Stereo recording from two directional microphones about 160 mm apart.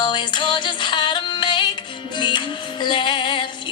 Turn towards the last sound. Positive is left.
turn(degrees=30)  # may be behind; listen again after turning